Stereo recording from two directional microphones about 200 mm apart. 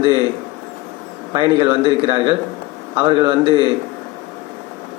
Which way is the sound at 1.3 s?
25° right (ahead or behind).